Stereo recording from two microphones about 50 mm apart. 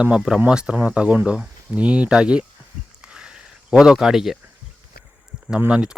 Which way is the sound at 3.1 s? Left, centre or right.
Centre.